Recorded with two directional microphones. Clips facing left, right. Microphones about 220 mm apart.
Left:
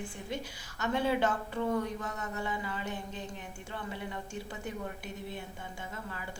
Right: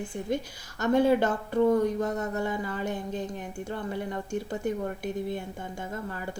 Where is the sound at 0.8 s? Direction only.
45° right (ahead or behind).